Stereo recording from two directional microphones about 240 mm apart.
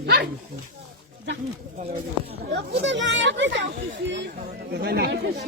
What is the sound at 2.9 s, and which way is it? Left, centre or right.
Speech, right.